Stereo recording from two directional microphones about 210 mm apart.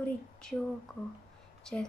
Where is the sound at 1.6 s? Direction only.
5° left (ahead or behind).